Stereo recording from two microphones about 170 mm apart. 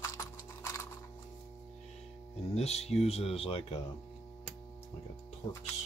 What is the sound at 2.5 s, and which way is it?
Speech, 40° left (ahead or behind).